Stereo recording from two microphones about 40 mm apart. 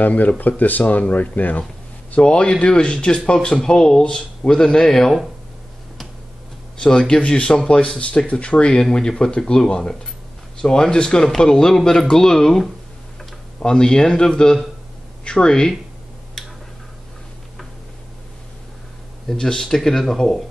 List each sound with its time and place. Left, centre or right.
0.0 s speech: left
1.6 s a sound: left
2.6 s speech: left
6.8 s speech: left
19.3 s speech: centre